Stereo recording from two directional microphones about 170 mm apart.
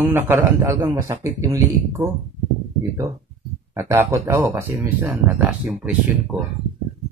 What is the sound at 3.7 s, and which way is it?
Speech, 15° right (ahead or behind).